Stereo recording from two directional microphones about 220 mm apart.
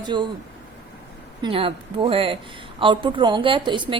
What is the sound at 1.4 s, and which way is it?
A woman's voice, 25° right (ahead or behind).